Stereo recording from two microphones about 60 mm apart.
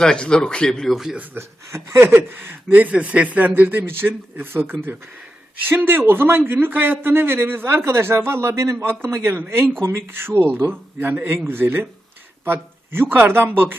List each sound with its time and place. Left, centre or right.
0.0 s a man's voice: centre
1.1 s speech: right
1.4 s a man's voice: right
2.0 s speech: right
2.6 s speech: right
5.6 s a man's voice: right
8.9 s a man's voice: right